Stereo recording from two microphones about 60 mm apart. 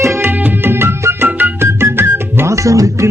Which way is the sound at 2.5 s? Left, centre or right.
Right.